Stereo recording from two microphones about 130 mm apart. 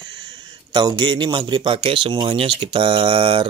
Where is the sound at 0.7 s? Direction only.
35° right (ahead or behind).